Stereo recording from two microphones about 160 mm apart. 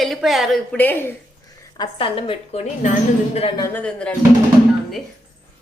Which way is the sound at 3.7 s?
5° left (ahead or behind).